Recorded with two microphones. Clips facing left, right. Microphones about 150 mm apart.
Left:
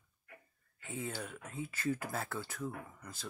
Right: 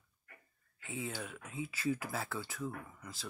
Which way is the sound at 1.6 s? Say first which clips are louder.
Right 1 dB; 50° left (ahead or behind).